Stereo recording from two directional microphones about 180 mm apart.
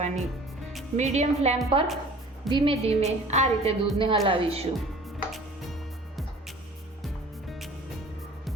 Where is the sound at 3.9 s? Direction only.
30° right (ahead or behind).